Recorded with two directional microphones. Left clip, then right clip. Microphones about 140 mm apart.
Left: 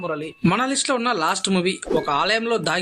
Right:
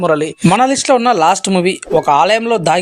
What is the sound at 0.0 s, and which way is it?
Speech, 55° right (ahead or behind).